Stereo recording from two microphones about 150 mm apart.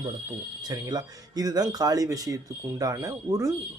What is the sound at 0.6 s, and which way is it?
Speech, 25° right (ahead or behind).